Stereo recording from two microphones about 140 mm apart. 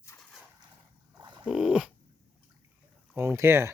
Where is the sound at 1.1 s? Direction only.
35° right (ahead or behind).